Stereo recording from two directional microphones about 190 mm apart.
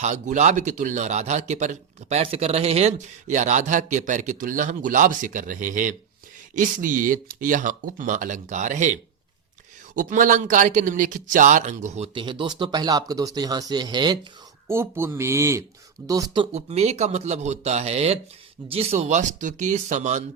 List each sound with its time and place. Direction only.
0.0 s a man's voice: 40° right (ahead or behind)